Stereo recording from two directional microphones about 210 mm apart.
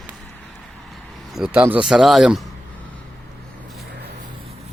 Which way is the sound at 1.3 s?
5° right (ahead or behind).